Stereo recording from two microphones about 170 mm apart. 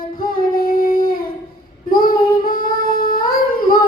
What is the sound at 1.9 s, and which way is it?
Child singing, 60° left (ahead or behind).